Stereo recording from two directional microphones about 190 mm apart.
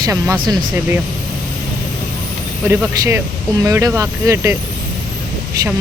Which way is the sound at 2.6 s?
15° right (ahead or behind).